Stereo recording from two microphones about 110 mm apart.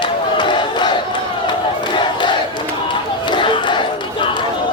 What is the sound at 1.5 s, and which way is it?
Crowd, 45° left (ahead or behind).